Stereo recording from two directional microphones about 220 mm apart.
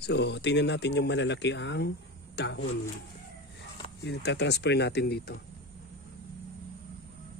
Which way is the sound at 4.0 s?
50° left (ahead or behind).